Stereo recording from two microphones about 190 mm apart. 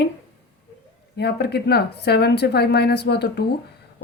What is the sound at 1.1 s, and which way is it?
A woman's voice, 60° left (ahead or behind).